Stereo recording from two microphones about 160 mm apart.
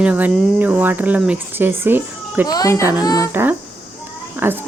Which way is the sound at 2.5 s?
20° left (ahead or behind).